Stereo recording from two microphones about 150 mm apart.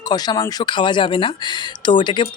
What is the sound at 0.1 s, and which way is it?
Speech, 25° left (ahead or behind).